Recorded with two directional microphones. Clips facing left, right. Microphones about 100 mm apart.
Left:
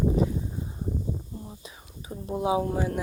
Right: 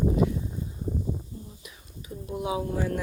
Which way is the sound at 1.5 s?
35° left (ahead or behind).